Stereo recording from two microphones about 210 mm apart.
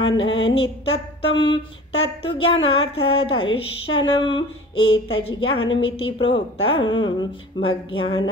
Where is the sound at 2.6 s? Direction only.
25° left (ahead or behind).